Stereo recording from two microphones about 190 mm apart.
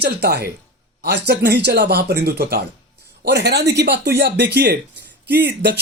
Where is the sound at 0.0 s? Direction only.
55° right (ahead or behind).